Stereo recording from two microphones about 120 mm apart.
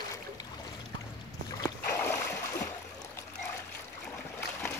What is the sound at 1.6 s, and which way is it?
Boat, 15° left (ahead or behind).